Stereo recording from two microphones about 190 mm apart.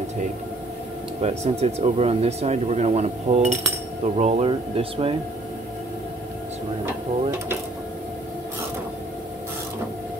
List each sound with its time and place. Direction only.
1.2 s speech: 35° right (ahead or behind)